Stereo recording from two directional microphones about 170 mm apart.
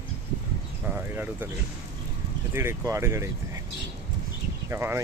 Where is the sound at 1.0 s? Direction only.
10° right (ahead or behind).